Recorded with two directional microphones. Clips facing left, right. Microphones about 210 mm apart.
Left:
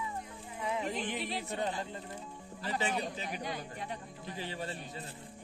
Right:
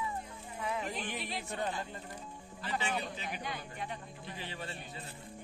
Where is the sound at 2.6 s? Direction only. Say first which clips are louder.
Left 2 dB; 35° left (ahead or behind).